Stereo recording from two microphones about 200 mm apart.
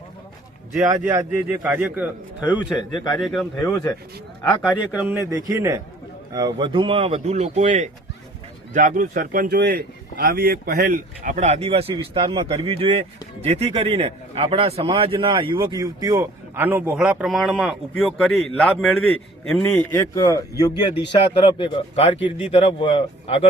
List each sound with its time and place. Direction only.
0.8 s a man's voice: 15° right (ahead or behind)
2.7 s speech: 20° left (ahead or behind)
4.6 s a man's voice: 5° right (ahead or behind); by 23.5 s 30° left (ahead or behind)